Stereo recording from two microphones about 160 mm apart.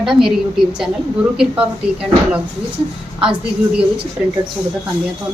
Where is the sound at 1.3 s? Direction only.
5° right (ahead or behind).